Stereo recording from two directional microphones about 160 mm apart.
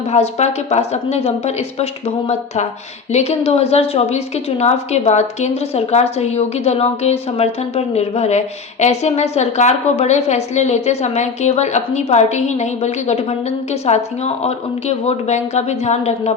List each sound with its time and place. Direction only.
0.1 s a woman's voice: 45° left (ahead or behind)